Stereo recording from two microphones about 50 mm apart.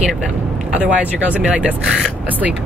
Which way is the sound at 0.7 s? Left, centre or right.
Right.